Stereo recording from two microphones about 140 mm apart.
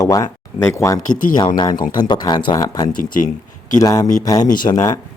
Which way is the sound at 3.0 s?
75° left (ahead or behind).